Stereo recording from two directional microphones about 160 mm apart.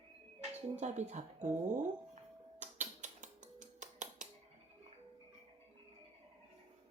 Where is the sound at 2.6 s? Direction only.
50° right (ahead or behind).